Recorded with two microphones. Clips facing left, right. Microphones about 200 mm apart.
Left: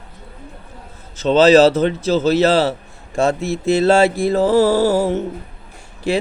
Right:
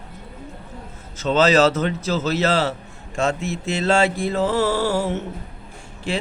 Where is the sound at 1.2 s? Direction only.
30° left (ahead or behind).